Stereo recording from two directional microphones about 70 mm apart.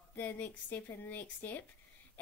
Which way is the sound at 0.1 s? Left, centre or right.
Left.